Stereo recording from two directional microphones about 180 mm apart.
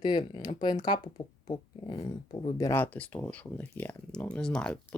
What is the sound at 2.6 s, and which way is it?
Speech, 15° left (ahead or behind).